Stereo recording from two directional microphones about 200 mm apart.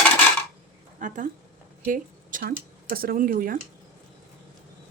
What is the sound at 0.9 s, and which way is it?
A woman's voice, 40° right (ahead or behind).